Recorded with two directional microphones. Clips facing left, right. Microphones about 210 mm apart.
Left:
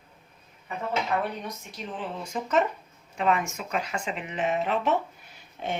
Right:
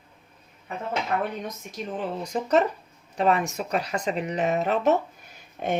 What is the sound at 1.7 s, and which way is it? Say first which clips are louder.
Speech: right 5 dB; 40° right (ahead or behind).